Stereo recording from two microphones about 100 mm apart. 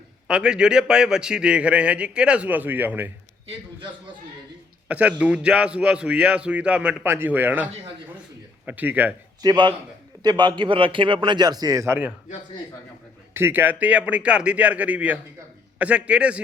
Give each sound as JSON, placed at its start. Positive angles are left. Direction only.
{"t": 0.3, "sound": "a man's voice", "side_deg": -10}
{"t": 4.9, "sound": "a man's voice", "side_deg": -15}
{"t": 9.4, "sound": "a man's voice", "side_deg": -45}
{"t": 11.9, "sound": "a man's voice", "side_deg": -15}
{"t": 13.3, "sound": "a man's voice", "side_deg": -20}